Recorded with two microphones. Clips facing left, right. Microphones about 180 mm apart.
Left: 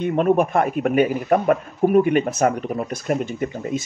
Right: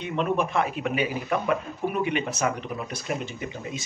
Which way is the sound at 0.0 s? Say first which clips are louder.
Left 8 dB; 50° left (ahead or behind).